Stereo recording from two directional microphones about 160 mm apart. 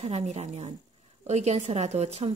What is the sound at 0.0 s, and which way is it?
A woman's voice, 40° right (ahead or behind).